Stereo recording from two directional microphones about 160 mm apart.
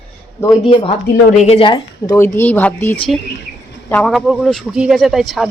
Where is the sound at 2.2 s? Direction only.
15° left (ahead or behind).